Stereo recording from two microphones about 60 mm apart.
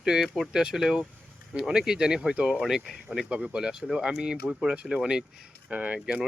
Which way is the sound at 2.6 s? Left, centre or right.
Centre.